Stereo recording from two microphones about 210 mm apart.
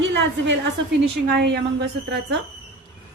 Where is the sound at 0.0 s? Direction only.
60° right (ahead or behind).